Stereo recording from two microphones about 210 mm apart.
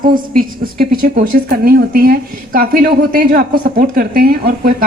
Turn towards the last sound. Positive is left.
turn(degrees=-45)  # may be behind; listen again after turning